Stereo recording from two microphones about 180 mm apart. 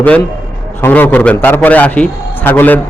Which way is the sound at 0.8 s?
10° left (ahead or behind).